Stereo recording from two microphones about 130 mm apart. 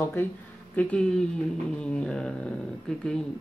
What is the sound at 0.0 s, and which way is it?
Speech, 15° left (ahead or behind).